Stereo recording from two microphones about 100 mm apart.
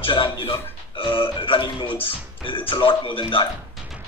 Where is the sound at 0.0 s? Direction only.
60° left (ahead or behind).